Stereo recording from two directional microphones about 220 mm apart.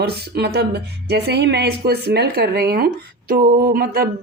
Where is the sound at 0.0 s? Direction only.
45° right (ahead or behind).